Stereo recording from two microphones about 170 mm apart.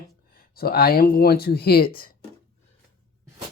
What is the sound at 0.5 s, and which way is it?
Speech, 65° left (ahead or behind).